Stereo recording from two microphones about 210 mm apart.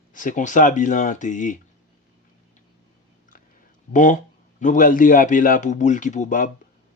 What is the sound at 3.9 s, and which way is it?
A man's voice, 35° left (ahead or behind).